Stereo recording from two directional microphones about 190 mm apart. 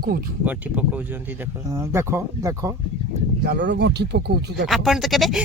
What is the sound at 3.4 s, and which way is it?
Speech, 60° right (ahead or behind).